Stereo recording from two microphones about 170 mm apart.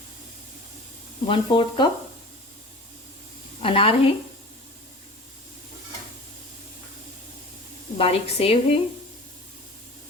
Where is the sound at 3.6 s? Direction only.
30° left (ahead or behind).